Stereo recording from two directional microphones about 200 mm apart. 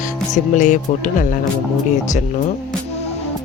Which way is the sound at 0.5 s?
40° left (ahead or behind).